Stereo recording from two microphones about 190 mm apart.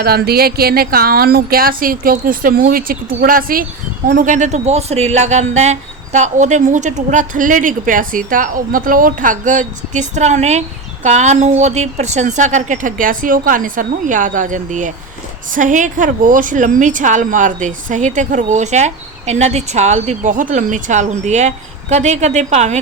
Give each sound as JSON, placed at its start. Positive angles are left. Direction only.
{"t": 0.0, "sound": "a woman's voice", "side_deg": -55}